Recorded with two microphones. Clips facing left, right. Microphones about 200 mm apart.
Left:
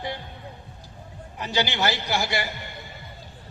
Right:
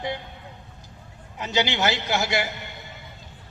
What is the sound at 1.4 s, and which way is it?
A man's voice, 20° right (ahead or behind).